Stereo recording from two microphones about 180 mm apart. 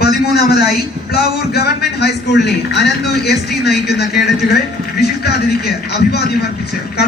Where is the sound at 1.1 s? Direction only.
60° left (ahead or behind).